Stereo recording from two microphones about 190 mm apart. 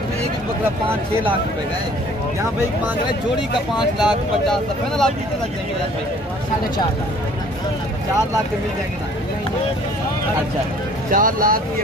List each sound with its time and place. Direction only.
3.7 s speech: centre (ahead or behind)
11.1 s speech: 45° right (ahead or behind)